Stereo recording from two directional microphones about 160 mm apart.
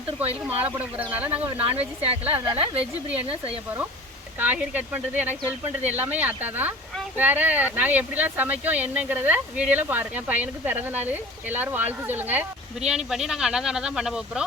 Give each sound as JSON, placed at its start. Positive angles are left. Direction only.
{"t": 0.2, "sound": "speech", "side_deg": -10}
{"t": 2.3, "sound": "speech", "side_deg": -35}
{"t": 2.8, "sound": "speech", "side_deg": -10}
{"t": 3.2, "sound": "speech", "side_deg": -35}
{"t": 4.4, "sound": "speech", "side_deg": -10}